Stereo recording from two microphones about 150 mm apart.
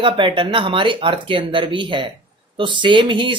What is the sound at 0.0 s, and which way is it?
Speech, 35° right (ahead or behind).